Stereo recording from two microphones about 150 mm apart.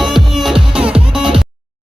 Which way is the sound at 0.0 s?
Centre (ahead or behind).